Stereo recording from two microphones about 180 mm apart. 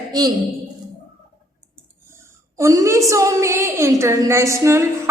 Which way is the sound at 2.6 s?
15° right (ahead or behind).